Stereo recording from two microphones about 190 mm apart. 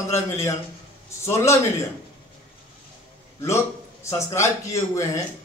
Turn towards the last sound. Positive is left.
turn(degrees=15)  # may be behind; listen again after turning